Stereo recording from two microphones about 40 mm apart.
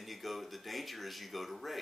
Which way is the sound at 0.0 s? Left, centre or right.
Centre.